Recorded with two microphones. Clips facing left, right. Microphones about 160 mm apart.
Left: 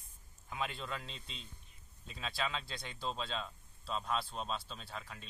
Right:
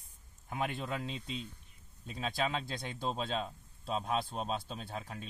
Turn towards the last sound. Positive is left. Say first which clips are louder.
# right 6 dB
turn(degrees=-45)  # may be behind; listen again after turning